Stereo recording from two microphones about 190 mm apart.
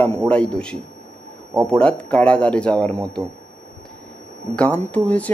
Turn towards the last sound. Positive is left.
turn(degrees=10)  # may be behind; listen again after turning